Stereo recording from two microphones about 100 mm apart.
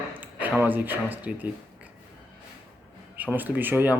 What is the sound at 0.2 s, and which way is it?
Speech, 15° right (ahead or behind).